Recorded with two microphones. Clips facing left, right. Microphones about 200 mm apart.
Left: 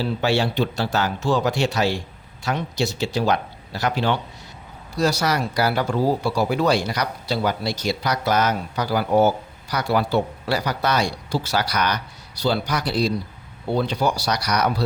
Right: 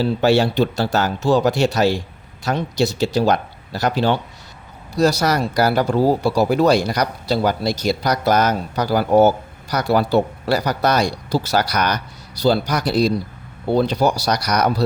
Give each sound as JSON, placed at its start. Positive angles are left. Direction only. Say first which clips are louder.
{"t": 0.0, "sound": "speech", "louder": "right 5 dB", "side_deg": -40}